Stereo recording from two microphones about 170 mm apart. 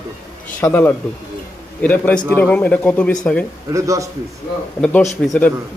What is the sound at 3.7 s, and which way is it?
Speech, 20° right (ahead or behind).